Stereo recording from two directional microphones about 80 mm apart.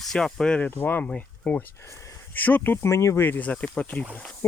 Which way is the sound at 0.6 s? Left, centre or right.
Left.